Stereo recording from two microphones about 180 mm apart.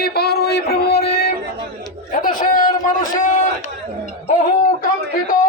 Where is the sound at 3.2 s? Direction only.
40° left (ahead or behind).